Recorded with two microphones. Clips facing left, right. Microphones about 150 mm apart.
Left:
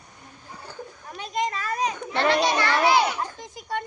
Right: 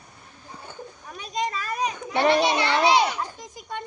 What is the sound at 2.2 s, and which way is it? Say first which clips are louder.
Children playing: right 1 dB; 20° right (ahead or behind).